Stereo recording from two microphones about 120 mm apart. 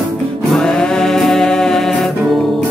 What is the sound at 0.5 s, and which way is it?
Music, 5° left (ahead or behind).